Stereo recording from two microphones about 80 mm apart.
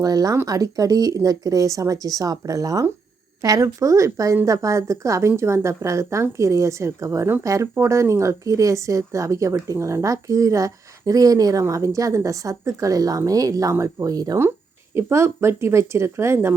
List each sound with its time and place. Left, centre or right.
0.0 s speech: right
14.9 s speech: right